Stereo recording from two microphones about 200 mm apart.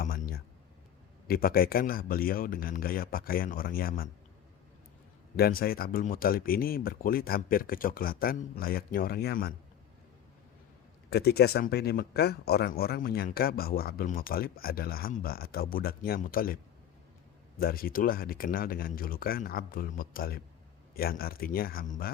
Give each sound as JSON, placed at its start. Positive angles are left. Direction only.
{"t": 0.0, "sound": "a sound", "side_deg": 45}
{"t": 1.3, "sound": "speech", "side_deg": 50}
{"t": 5.4, "sound": "speech", "side_deg": 50}
{"t": 11.1, "sound": "speech", "side_deg": 55}
{"t": 17.6, "sound": "speech", "side_deg": 45}